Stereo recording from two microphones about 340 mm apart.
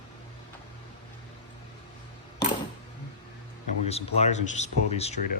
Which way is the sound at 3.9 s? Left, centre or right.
Centre.